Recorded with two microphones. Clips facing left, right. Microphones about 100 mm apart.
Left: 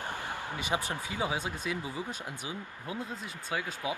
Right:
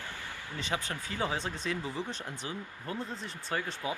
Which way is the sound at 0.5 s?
15° left (ahead or behind).